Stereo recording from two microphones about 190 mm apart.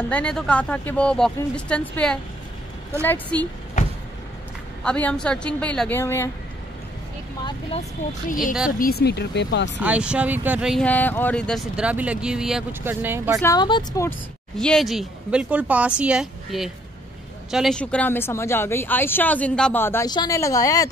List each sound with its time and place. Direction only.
0.1 s speech: 5° left (ahead or behind)
4.8 s speech: 5° left (ahead or behind)
8.3 s speech: 45° left (ahead or behind); by 9.7 s 65° left (ahead or behind)
9.8 s speech: 5° right (ahead or behind)
10.9 s speech: 10° left (ahead or behind); by 13.4 s 10° right (ahead or behind)
13.4 s a woman's voice: 20° left (ahead or behind)
14.6 s speech: centre (ahead or behind); by 20.9 s 20° left (ahead or behind)